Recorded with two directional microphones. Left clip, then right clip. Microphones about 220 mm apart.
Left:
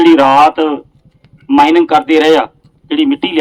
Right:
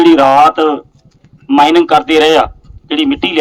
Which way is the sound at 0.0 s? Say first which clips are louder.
Even; 10° right (ahead or behind).